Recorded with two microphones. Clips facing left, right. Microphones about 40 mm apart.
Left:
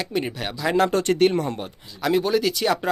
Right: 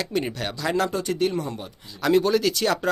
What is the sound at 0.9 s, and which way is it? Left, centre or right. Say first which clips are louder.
Speech: left 5 dB; left.